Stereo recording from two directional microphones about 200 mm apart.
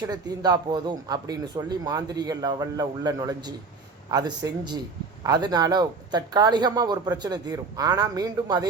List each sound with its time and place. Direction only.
0.0 s speech: 20° right (ahead or behind)